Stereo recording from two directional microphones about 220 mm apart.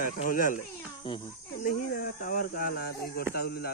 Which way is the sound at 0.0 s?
40° left (ahead or behind).